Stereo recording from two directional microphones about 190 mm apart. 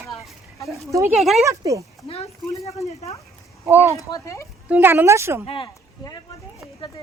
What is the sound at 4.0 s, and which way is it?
Speech, 15° left (ahead or behind).